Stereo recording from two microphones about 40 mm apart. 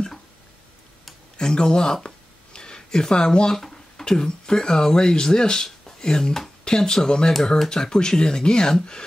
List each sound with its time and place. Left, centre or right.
1.4 s speech: centre